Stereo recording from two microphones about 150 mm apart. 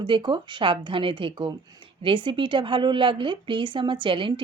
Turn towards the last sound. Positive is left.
turn(degrees=-35)  # may be behind; listen again after turning